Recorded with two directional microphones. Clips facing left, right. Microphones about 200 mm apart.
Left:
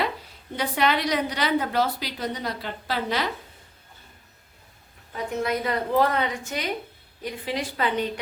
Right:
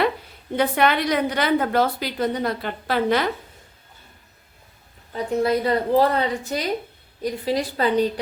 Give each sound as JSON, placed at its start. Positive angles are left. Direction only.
{"t": 0.5, "sound": "a woman's voice", "side_deg": -55}
{"t": 5.1, "sound": "a woman's voice", "side_deg": -30}